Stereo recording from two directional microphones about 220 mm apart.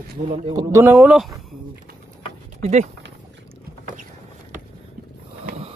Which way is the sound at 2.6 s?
30° right (ahead or behind).